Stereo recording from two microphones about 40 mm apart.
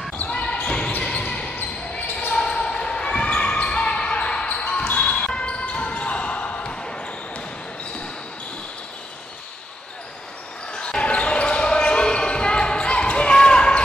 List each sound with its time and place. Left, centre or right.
0.7 s basketball bounce: left
2.3 s basketball bounce: left
10.7 s basketball bounce: left